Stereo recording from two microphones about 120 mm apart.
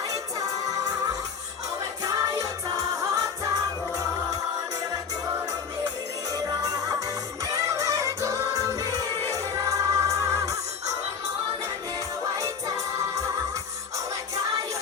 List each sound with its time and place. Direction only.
2.0 s music: 25° right (ahead or behind)
6.3 s music: 30° right (ahead or behind)
12.4 s music: 25° right (ahead or behind)